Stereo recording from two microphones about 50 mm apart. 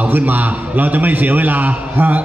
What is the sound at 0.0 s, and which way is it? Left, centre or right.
A man's voice, right.